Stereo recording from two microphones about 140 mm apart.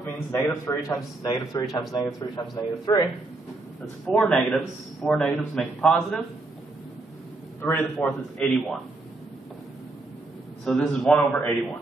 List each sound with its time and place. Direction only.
0.0 s a man's voice: 25° left (ahead or behind)
3.8 s a man's voice: 5° left (ahead or behind)
7.6 s a man's voice: 15° left (ahead or behind)
10.6 s a man's voice: 5° left (ahead or behind)